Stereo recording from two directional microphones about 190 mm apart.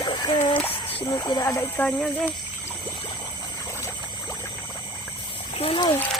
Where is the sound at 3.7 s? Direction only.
15° left (ahead or behind).